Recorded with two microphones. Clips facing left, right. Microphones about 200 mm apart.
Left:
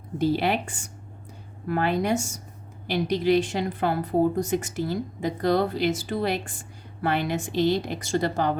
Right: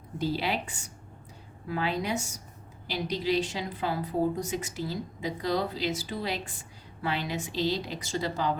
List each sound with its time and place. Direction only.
0.2 s a woman's voice: 55° left (ahead or behind)